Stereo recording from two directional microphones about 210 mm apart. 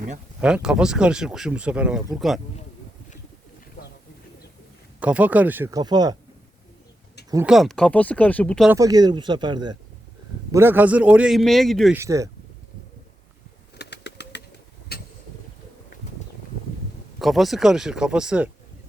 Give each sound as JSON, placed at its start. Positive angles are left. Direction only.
{"t": 0.4, "sound": "speech", "side_deg": -5}
{"t": 4.9, "sound": "speech", "side_deg": -5}
{"t": 7.4, "sound": "speech", "side_deg": 0}
{"t": 8.7, "sound": "speech", "side_deg": -15}
{"t": 10.5, "sound": "speech", "side_deg": -10}
{"t": 11.9, "sound": "speech", "side_deg": -15}
{"t": 13.7, "sound": "bird", "side_deg": 55}
{"t": 14.9, "sound": "boat", "side_deg": 50}
{"t": 17.2, "sound": "speech", "side_deg": 0}